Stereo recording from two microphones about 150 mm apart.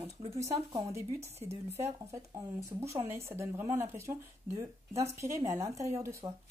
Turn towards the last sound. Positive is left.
turn(degrees=-20)  # may be behind; listen again after turning